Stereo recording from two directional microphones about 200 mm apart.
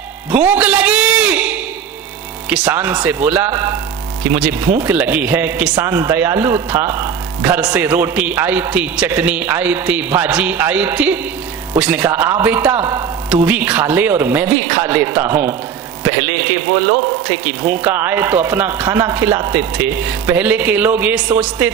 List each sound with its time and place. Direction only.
0.3 s music: 10° right (ahead or behind)
2.5 s speech: 10° right (ahead or behind)
17.8 s speech: 10° right (ahead or behind)